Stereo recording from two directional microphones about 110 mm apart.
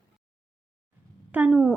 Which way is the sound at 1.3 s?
15° right (ahead or behind).